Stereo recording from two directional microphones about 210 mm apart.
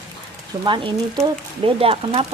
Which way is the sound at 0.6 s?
20° right (ahead or behind).